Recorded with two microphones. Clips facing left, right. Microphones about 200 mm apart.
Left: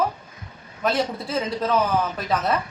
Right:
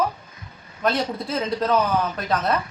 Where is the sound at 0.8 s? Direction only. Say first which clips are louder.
Even; centre (ahead or behind).